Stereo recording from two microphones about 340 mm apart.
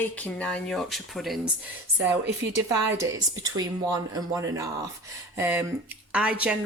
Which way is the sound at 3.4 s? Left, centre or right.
Centre.